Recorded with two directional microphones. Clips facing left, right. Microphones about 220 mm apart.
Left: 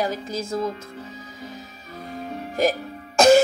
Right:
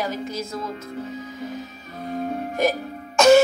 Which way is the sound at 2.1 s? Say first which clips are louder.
Right 6 dB; 45° right (ahead or behind).